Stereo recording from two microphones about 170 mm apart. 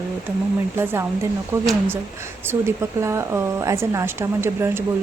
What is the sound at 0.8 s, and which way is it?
Speech, 15° right (ahead or behind).